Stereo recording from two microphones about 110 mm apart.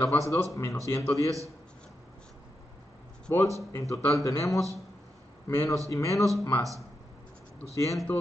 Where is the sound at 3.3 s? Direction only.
25° left (ahead or behind).